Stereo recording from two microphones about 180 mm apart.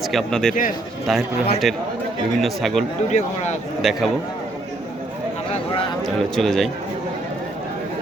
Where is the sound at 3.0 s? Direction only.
40° left (ahead or behind).